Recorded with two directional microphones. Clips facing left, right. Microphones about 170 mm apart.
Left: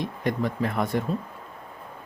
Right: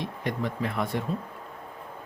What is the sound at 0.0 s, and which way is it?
Speech, 45° left (ahead or behind).